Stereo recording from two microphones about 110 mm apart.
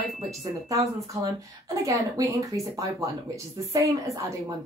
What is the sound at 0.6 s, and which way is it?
Speech, 30° right (ahead or behind).